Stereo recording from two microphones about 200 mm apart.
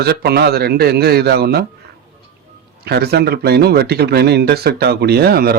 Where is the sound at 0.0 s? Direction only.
55° right (ahead or behind).